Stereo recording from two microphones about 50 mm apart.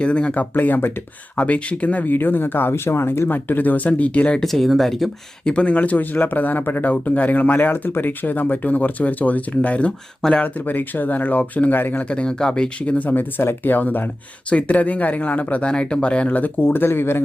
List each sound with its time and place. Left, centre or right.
0.0 s speech: left
0.5 s speech: left
1.4 s speech: left
2.1 s speech: left
3.2 s speech: left
4.4 s speech: centre
5.5 s speech: left
10.4 s speech: left
12.0 s speech: left
13.1 s speech: left
15.7 s speech: centre
16.6 s speech: left